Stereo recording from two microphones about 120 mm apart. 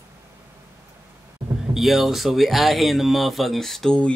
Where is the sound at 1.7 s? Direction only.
Centre (ahead or behind).